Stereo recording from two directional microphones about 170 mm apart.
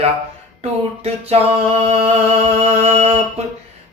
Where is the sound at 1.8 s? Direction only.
35° right (ahead or behind).